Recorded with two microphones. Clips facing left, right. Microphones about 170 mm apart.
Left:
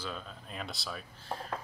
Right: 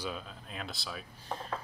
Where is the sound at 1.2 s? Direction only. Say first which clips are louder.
Even; 20° right (ahead or behind).